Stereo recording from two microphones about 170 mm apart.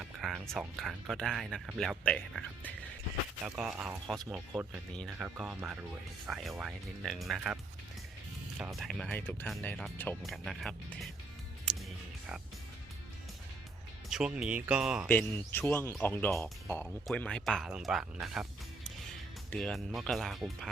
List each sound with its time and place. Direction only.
0.0 s speech: 5° right (ahead or behind)
3.4 s speech: 5° right (ahead or behind)
14.1 s speech: 5° right (ahead or behind)
15.0 s speech: 10° left (ahead or behind)
19.5 s speech: 5° left (ahead or behind)